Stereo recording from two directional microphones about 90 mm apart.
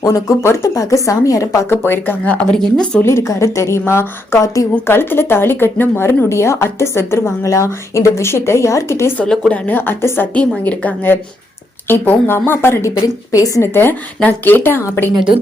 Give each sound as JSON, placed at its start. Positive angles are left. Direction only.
{"t": 0.0, "sound": "speech", "side_deg": 35}
{"t": 2.5, "sound": "speech", "side_deg": 10}
{"t": 3.0, "sound": "speech", "side_deg": 30}
{"t": 9.1, "sound": "speech", "side_deg": 10}
{"t": 9.6, "sound": "speech", "side_deg": 25}
{"t": 10.3, "sound": "speech", "side_deg": 15}
{"t": 12.9, "sound": "speech", "side_deg": 40}
{"t": 14.2, "sound": "speech", "side_deg": 20}